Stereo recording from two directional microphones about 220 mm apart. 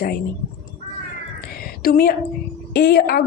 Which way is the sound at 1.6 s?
40° left (ahead or behind).